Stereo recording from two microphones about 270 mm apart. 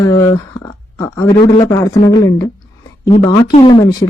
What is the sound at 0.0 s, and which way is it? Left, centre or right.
Speech, centre.